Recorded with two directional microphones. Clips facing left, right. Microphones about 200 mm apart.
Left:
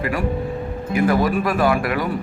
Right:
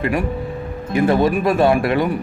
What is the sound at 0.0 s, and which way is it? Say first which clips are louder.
Speech: right 2 dB; 20° right (ahead or behind).